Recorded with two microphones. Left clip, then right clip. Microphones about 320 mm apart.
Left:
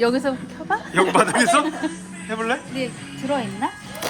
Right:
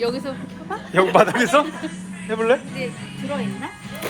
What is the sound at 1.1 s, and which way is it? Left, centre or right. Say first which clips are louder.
A man's voice: right 2 dB; centre.